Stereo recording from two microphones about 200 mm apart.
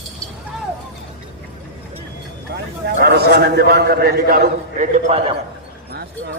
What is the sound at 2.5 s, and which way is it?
A man's voice, 55° right (ahead or behind).